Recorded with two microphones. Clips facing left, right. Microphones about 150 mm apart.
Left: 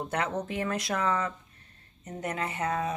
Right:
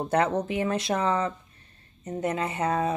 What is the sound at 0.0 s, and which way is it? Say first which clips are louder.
Speech: right 7 dB; 35° right (ahead or behind).